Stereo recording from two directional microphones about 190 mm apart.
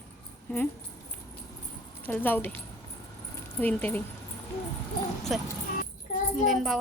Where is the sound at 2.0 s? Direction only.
10° left (ahead or behind).